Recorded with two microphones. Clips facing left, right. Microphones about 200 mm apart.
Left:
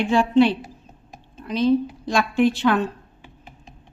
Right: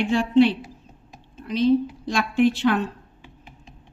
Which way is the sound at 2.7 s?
85° left.